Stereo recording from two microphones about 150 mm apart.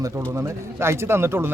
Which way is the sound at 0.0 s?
20° right (ahead or behind).